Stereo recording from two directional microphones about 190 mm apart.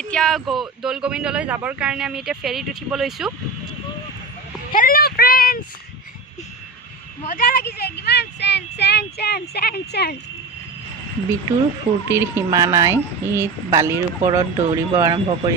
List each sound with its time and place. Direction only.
0.1 s speech: 5° left (ahead or behind)
4.7 s speech: 45° left (ahead or behind)
7.3 s speech: 50° left (ahead or behind)
12.0 s speech: 15° right (ahead or behind)